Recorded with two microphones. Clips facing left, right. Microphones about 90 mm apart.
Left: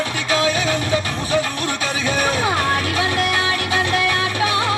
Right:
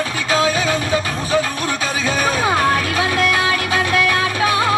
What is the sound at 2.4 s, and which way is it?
Music, 35° right (ahead or behind).